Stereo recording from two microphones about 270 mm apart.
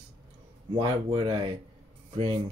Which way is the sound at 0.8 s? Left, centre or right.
Centre.